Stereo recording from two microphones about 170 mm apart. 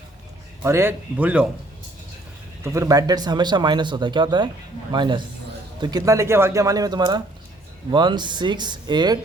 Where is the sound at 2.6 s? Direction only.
15° right (ahead or behind).